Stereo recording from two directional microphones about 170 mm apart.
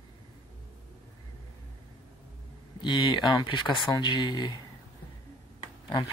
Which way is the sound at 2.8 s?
25° left (ahead or behind).